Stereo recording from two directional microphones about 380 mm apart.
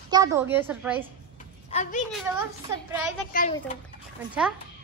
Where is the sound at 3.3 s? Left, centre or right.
Centre.